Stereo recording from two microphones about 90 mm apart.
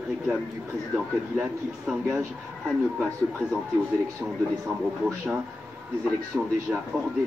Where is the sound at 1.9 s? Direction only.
Centre (ahead or behind).